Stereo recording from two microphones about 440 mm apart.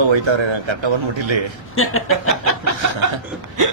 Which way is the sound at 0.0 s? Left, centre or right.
Right.